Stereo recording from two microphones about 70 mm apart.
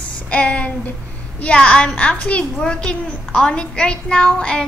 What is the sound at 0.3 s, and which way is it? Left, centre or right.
A woman's voice, centre.